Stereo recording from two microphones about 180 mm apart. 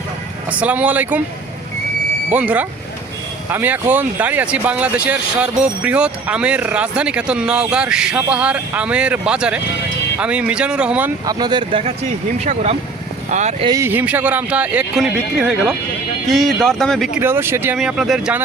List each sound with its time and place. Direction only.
0.6 s speech: 10° right (ahead or behind)
2.3 s speech: 10° right (ahead or behind)
11.3 s speech: 25° right (ahead or behind)
13.3 s speech: 40° right (ahead or behind)
13.7 s speech: 15° right (ahead or behind); by 17.1 s centre (ahead or behind)
17.2 s speech: 10° right (ahead or behind)